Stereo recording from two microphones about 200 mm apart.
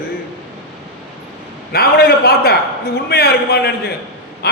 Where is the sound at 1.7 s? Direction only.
50° left (ahead or behind).